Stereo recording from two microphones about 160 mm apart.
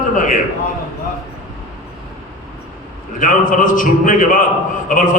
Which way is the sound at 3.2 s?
55° left (ahead or behind).